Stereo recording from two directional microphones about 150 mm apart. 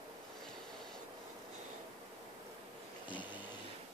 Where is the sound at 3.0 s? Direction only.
30° left (ahead or behind).